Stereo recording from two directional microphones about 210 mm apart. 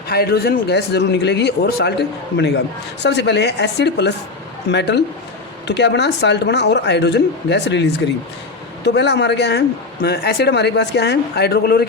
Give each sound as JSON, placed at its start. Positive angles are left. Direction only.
{"t": 0.1, "sound": "speech", "side_deg": 50}